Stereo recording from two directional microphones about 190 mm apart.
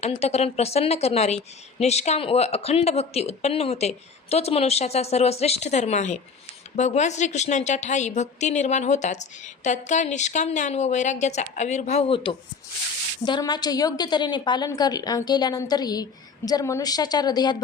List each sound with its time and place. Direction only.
0.0 s a woman's voice: 35° left (ahead or behind)